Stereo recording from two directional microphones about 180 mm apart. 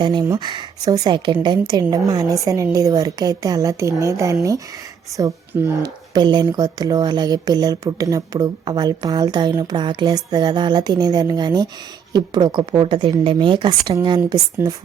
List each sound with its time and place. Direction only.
0.0 s speech: 25° right (ahead or behind)